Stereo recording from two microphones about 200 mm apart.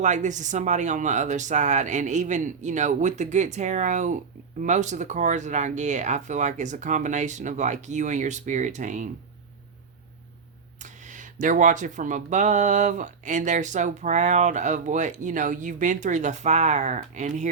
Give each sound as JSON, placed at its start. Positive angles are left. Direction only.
{"t": 0.0, "sound": "speech", "side_deg": -35}
{"t": 10.8, "sound": "speech", "side_deg": -40}